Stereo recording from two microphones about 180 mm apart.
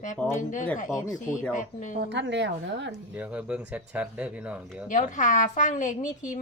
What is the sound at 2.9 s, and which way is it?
Speech, 10° right (ahead or behind).